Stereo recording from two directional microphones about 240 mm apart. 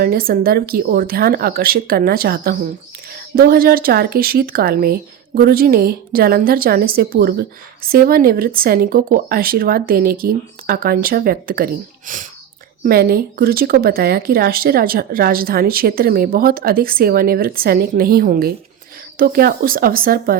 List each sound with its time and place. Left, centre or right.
0.0 s speech: right